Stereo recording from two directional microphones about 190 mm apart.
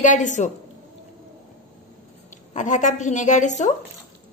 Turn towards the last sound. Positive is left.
turn(degrees=40)  # may be behind; listen again after turning